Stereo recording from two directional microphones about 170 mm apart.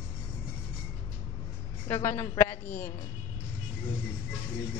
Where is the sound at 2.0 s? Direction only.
15° left (ahead or behind).